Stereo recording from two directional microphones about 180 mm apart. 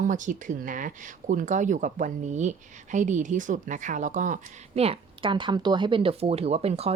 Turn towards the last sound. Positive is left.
turn(degrees=-35)  # may be behind; listen again after turning